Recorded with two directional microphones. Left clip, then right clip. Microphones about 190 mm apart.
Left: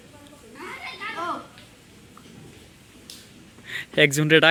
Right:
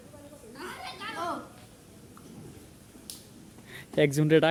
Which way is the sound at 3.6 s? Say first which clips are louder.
Left 7 dB; 5° right (ahead or behind).